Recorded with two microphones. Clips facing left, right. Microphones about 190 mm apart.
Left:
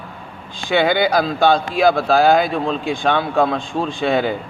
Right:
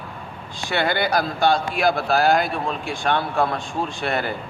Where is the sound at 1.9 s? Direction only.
90° left.